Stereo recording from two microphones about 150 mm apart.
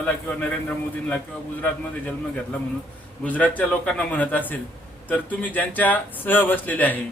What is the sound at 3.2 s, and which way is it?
A man's voice, 10° left (ahead or behind).